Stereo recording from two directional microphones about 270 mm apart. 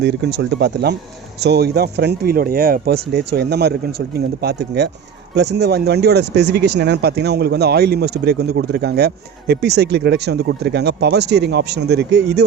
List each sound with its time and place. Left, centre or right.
0.0 s speech: right